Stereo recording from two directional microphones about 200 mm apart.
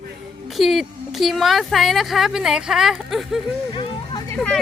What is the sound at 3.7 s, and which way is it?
Hubbub, 25° left (ahead or behind).